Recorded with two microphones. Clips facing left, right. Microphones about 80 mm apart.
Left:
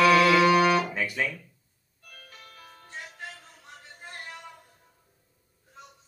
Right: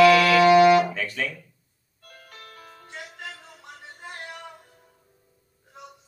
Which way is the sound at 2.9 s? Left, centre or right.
Right.